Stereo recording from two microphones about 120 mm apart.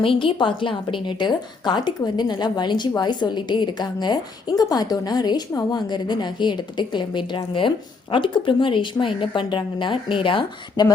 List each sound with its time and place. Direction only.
0.0 s a woman's voice: 45° left (ahead or behind)